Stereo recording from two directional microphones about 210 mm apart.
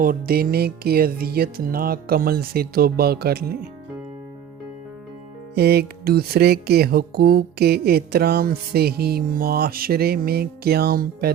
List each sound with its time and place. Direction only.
0.0 s music: 45° right (ahead or behind)
5.5 s music: 50° right (ahead or behind)